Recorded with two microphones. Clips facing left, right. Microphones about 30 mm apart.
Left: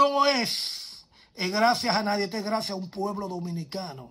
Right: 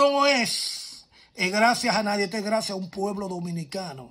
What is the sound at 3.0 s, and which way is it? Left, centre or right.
Speech, right.